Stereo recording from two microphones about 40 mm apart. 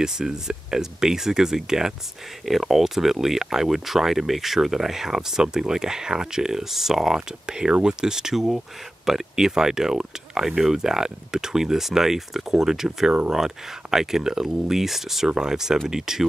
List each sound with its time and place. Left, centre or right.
0.0 s speech: centre
2.4 s speech: centre
7.2 s speech: right